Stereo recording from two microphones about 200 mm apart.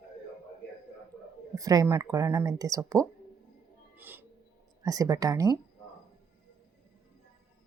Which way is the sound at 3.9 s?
10° right (ahead or behind).